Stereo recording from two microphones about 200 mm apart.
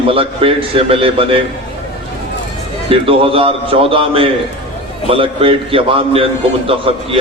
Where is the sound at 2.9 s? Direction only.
25° right (ahead or behind).